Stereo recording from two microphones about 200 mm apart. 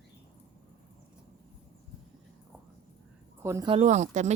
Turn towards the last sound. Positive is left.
turn(degrees=-35)  # may be behind; listen again after turning